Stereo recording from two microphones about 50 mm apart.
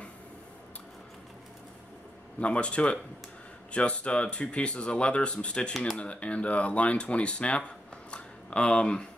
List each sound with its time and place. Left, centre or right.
2.4 s speech: left